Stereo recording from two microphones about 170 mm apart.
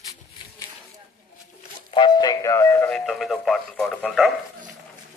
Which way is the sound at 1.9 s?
25° left (ahead or behind).